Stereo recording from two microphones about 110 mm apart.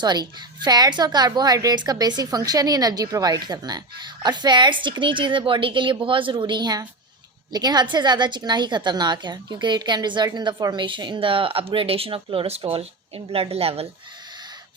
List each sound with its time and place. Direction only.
0.0 s a woman's voice: 40° right (ahead or behind); by 13.8 s 65° right (ahead or behind)